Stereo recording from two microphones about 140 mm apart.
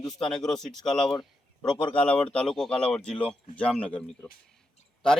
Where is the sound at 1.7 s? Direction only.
40° left (ahead or behind).